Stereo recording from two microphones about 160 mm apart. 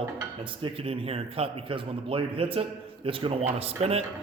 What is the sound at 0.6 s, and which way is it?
Speech, 35° right (ahead or behind).